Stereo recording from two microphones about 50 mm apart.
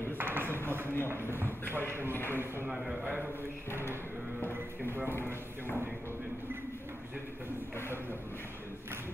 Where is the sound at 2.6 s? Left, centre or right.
Centre.